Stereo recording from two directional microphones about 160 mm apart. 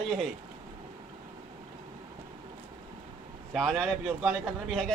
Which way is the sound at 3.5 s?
Centre (ahead or behind).